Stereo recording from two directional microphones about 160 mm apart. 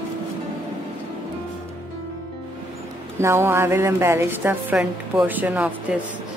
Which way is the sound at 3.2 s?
15° right (ahead or behind).